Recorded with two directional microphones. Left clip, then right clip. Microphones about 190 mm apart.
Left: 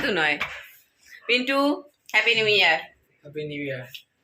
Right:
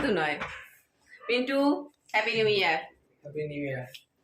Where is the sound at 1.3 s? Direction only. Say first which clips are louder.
Left 4 dB; 20° left (ahead or behind).